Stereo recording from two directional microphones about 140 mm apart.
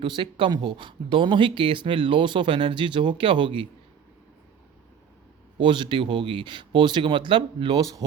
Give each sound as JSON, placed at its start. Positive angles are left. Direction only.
{"t": 0.0, "sound": "speech", "side_deg": -35}
{"t": 5.6, "sound": "speech", "side_deg": -35}